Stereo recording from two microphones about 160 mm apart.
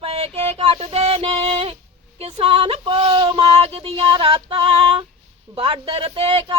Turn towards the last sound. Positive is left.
turn(degrees=-35)  # may be behind; listen again after turning